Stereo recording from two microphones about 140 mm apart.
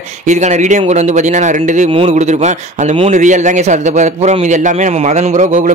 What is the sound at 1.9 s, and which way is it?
Speech, 50° right (ahead or behind).